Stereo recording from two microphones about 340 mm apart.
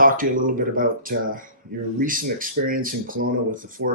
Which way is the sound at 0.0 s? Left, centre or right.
Right.